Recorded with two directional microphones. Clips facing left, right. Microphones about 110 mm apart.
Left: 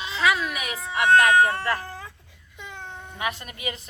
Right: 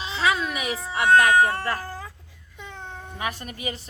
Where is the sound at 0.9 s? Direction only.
30° right (ahead or behind).